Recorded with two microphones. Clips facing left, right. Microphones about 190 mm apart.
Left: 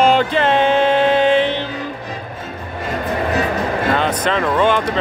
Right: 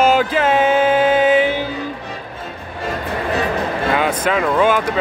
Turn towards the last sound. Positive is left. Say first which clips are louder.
# even
turn(degrees=-5)  # may be behind; listen again after turning